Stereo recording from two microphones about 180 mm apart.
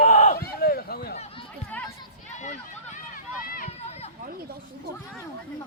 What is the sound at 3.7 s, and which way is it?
Run, 35° left (ahead or behind).